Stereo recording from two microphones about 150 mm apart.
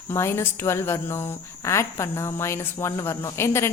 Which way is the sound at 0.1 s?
15° left (ahead or behind).